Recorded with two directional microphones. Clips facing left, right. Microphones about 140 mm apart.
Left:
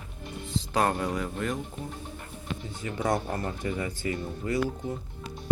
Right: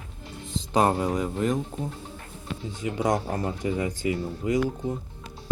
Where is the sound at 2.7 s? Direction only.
15° right (ahead or behind).